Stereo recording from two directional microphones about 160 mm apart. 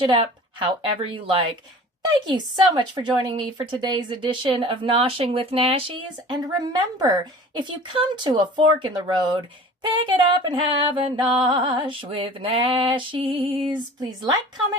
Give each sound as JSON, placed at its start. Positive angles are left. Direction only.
{"t": 0.0, "sound": "speech", "side_deg": -30}